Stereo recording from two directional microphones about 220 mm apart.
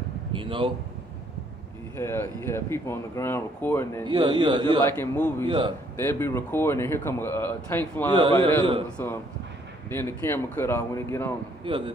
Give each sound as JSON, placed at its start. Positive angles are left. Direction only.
{"t": 0.3, "sound": "speech", "side_deg": -25}
{"t": 2.0, "sound": "speech", "side_deg": 10}
{"t": 4.0, "sound": "speech", "side_deg": -20}
{"t": 4.8, "sound": "speech", "side_deg": 10}
{"t": 8.1, "sound": "speech", "side_deg": -20}
{"t": 8.9, "sound": "speech", "side_deg": 10}
{"t": 11.6, "sound": "a man's voice", "side_deg": -20}